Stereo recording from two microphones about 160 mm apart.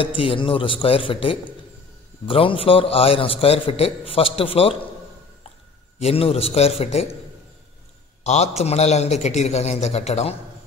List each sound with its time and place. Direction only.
0.0 s a man's voice: 35° left (ahead or behind)
5.9 s a man's voice: 40° left (ahead or behind)
8.2 s a man's voice: 45° left (ahead or behind)